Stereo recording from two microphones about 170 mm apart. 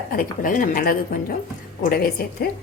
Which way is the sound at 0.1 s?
55° left (ahead or behind).